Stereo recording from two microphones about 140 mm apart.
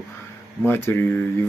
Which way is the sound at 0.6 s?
15° left (ahead or behind).